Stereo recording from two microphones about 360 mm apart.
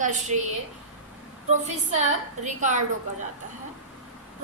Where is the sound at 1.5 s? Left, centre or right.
Centre.